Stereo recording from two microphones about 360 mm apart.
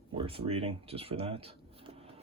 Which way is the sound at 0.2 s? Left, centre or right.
Centre.